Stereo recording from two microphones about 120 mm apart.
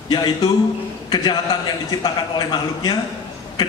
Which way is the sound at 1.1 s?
35° left (ahead or behind).